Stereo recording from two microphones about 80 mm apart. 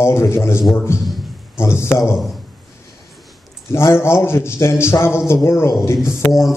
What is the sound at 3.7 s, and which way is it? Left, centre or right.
A man's voice, left.